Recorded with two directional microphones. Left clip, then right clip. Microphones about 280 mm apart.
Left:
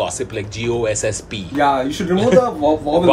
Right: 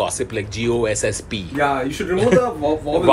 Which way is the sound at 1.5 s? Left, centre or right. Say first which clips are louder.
Left 4 dB; left.